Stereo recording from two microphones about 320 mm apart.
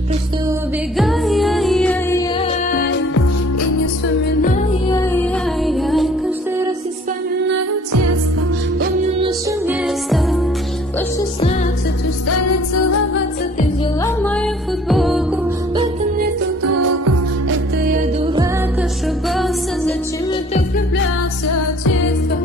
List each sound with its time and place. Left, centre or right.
0.5 s music: centre
2.3 s music: centre
4.8 s music: centre
7.9 s music: right
9.7 s music: centre
12.3 s music: left
14.0 s music: centre
16.7 s music: right
17.9 s music: centre
18.8 s music: centre
20.5 s music: left